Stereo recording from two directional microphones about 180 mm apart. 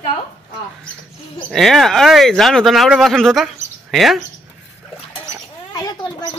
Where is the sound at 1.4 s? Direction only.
Centre (ahead or behind).